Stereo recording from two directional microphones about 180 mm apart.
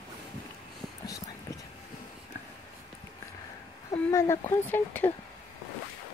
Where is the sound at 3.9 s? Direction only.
15° left (ahead or behind).